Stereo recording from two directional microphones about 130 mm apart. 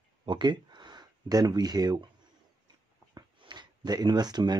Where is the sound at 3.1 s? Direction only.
35° right (ahead or behind).